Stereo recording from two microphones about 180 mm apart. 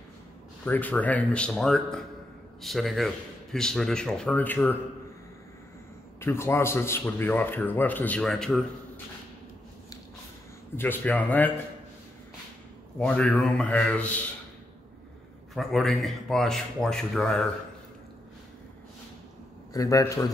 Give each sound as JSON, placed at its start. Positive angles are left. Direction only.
{"t": 0.7, "sound": "a man's voice", "side_deg": 10}
{"t": 6.2, "sound": "speech", "side_deg": 15}
{"t": 10.8, "sound": "speech", "side_deg": 10}
{"t": 13.0, "sound": "speech", "side_deg": 5}
{"t": 15.5, "sound": "a man's voice", "side_deg": 0}
{"t": 19.7, "sound": "a man's voice", "side_deg": 20}